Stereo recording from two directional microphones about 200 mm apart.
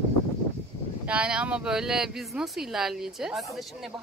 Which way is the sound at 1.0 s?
5° right (ahead or behind).